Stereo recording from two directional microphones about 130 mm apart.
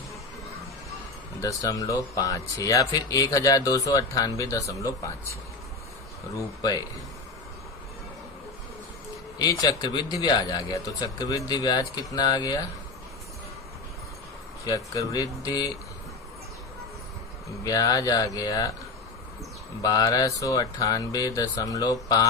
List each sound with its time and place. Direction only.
1.4 s speech: 25° left (ahead or behind)
6.3 s speech: 30° left (ahead or behind)
9.4 s speech: 30° left (ahead or behind)
14.7 s speech: 25° left (ahead or behind)
17.6 s speech: 25° left (ahead or behind)
19.8 s speech: 25° left (ahead or behind)